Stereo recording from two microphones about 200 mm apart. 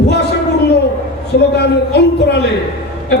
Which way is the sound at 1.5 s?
55° left (ahead or behind).